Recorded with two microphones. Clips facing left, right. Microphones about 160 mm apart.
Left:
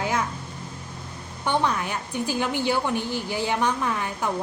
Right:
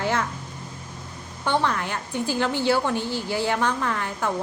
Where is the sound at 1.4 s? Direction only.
15° left (ahead or behind).